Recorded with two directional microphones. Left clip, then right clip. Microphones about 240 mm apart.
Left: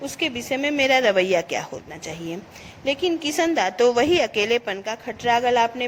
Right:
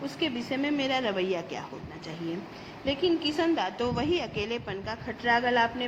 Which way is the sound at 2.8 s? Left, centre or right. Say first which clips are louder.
Left 4 dB; left.